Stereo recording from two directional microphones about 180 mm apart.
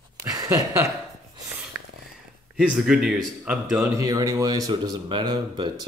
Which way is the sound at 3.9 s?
20° right (ahead or behind).